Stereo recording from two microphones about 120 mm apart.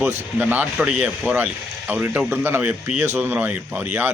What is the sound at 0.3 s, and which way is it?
Speech, 15° right (ahead or behind).